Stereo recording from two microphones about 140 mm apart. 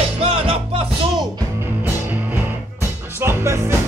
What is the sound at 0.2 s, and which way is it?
Music, 45° right (ahead or behind).